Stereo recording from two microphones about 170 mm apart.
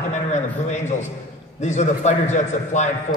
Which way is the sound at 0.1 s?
40° left (ahead or behind).